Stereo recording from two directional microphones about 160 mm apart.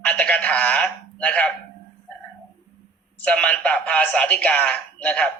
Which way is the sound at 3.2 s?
10° left (ahead or behind).